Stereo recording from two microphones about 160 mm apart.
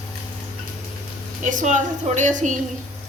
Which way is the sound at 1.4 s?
55° right (ahead or behind).